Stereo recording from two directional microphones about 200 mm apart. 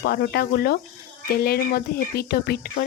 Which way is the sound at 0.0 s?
50° left (ahead or behind).